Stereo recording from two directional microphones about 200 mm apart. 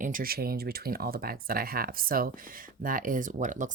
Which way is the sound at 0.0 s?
45° right (ahead or behind).